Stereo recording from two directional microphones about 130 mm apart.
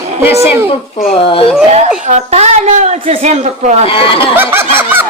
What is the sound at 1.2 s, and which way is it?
Speech, 45° left (ahead or behind).